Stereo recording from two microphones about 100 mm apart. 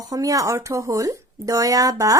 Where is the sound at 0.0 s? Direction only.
35° right (ahead or behind).